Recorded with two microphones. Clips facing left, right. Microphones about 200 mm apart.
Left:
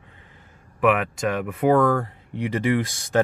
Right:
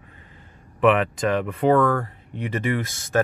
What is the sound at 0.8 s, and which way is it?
Speech, 5° left (ahead or behind).